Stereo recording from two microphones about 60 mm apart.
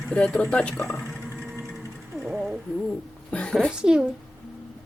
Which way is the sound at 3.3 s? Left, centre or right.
Centre.